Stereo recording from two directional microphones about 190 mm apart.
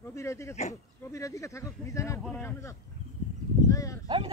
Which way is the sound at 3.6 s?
15° left (ahead or behind).